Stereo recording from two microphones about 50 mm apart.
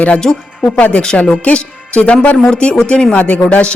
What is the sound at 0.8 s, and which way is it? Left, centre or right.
Speech, left.